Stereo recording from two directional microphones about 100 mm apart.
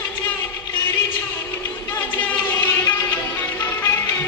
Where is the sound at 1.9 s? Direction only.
15° left (ahead or behind).